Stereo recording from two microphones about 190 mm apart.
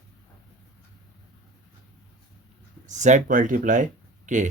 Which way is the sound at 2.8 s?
40° right (ahead or behind).